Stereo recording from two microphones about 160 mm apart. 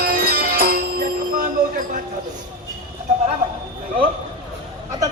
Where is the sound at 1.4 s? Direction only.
55° right (ahead or behind).